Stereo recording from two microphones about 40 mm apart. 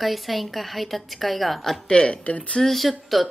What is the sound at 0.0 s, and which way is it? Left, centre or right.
A woman's voice, centre.